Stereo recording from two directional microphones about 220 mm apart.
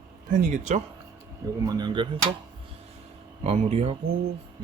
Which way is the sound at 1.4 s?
20° right (ahead or behind).